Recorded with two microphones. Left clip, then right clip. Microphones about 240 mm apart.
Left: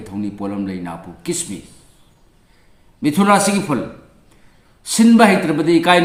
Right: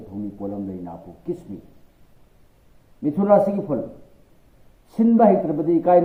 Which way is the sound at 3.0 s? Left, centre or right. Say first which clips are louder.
Left 3 dB; centre.